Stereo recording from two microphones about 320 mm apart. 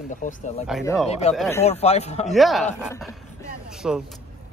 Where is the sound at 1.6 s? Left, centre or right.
Centre.